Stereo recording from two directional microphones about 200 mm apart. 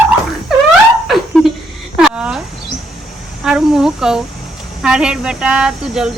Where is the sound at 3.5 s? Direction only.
5° right (ahead or behind).